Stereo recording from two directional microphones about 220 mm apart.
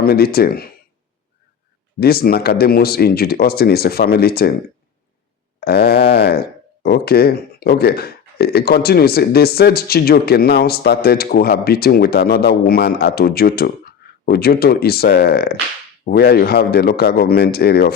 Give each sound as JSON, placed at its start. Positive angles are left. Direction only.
{"t": 0.0, "sound": "speech", "side_deg": 45}
{"t": 2.0, "sound": "speech", "side_deg": 45}
{"t": 5.5, "sound": "speech", "side_deg": 45}